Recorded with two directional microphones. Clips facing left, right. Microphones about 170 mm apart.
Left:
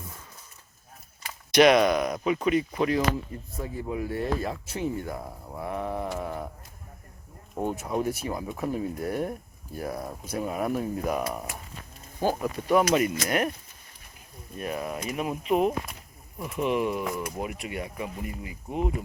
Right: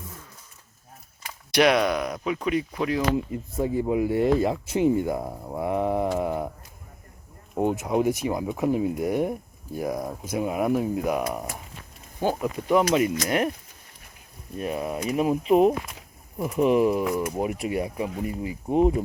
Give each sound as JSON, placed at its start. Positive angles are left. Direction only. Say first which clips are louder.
{"t": 1.5, "sound": "speech", "louder": "left 2 dB", "side_deg": -5}
{"t": 3.3, "sound": "speech", "louder": "right 9 dB", "side_deg": -20}
{"t": 5.2, "sound": "speech", "louder": "right 7 dB", "side_deg": -30}
{"t": 5.6, "sound": "speech", "louder": "right 7 dB", "side_deg": -20}
{"t": 7.5, "sound": "speech", "louder": "right 5 dB", "side_deg": -20}
{"t": 14.6, "sound": "speech", "louder": "right 4 dB", "side_deg": -25}